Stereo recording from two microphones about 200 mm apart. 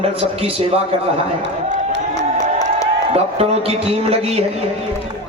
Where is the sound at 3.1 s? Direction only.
30° right (ahead or behind).